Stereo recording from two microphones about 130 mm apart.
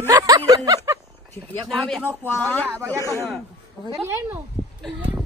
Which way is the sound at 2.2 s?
15° left (ahead or behind).